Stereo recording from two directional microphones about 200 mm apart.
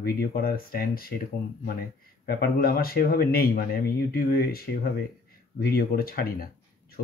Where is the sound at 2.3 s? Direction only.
50° left (ahead or behind).